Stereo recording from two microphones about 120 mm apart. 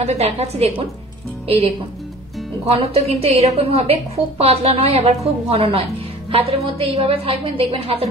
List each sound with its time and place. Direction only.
0.0 s a woman's voice: 65° right (ahead or behind)
2.6 s a woman's voice: 55° right (ahead or behind)